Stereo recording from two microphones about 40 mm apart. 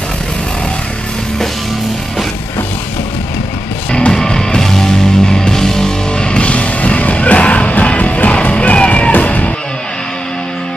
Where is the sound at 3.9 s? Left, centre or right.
Left.